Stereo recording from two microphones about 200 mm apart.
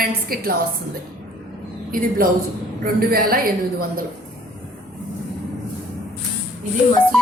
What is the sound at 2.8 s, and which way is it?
A woman's voice, 50° right (ahead or behind).